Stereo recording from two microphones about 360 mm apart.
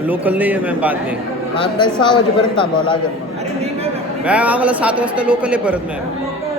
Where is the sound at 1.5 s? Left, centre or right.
Centre.